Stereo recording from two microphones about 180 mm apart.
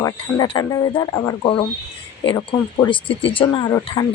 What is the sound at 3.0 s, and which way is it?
Speech, 30° left (ahead or behind).